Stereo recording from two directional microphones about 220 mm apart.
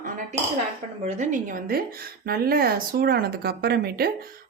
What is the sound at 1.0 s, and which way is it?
A woman's voice, 30° right (ahead or behind).